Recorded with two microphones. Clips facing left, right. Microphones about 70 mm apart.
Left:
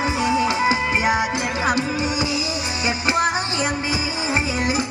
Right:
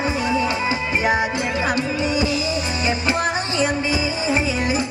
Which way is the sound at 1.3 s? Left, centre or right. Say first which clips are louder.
Even; left.